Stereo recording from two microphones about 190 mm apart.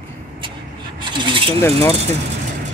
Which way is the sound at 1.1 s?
25° right (ahead or behind).